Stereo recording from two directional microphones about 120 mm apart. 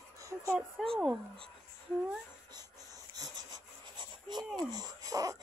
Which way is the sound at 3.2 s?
35° right (ahead or behind).